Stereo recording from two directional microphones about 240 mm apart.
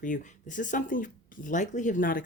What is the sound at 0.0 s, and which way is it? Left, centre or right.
Speech, left.